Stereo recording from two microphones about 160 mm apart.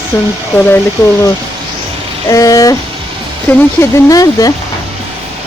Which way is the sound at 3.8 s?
20° left (ahead or behind).